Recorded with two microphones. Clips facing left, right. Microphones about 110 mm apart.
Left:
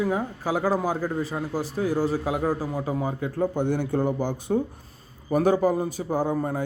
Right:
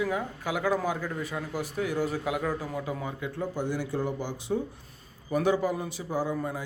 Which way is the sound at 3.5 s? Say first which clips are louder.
Left 6 dB; 55° left (ahead or behind).